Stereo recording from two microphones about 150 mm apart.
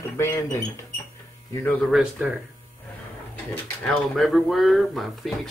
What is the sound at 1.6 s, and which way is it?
Speech, 5° left (ahead or behind).